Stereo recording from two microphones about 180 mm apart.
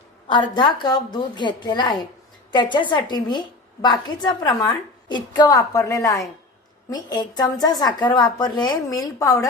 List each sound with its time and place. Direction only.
0.3 s a woman's voice: 25° left (ahead or behind)